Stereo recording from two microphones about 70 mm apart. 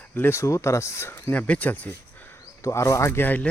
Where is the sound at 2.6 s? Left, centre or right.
Left.